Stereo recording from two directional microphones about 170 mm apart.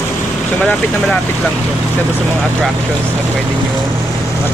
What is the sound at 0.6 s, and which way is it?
Speech, 5° left (ahead or behind).